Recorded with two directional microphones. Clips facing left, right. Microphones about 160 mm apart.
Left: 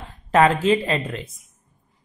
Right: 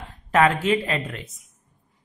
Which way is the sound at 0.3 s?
30° left (ahead or behind).